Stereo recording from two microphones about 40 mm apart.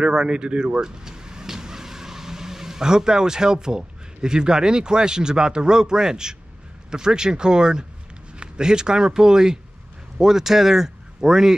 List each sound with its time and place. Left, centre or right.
0.0 s a man's voice: right